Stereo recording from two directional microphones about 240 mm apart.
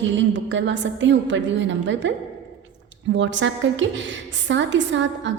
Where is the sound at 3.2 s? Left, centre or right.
Right.